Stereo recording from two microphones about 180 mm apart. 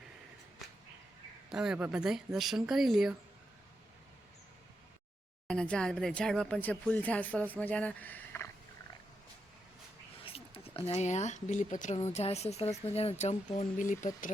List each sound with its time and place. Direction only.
1.5 s speech: 5° right (ahead or behind)
5.5 s speech: 5° left (ahead or behind)
10.2 s speech: 35° left (ahead or behind)
13.7 s speech: 45° left (ahead or behind)